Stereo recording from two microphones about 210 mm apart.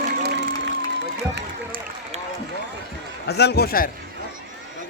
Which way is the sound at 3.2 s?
50° left (ahead or behind).